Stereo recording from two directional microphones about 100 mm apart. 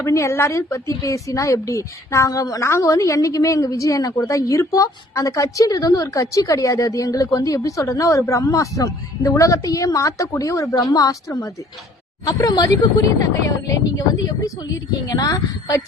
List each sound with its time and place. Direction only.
0.0 s a woman's voice: 30° left (ahead or behind)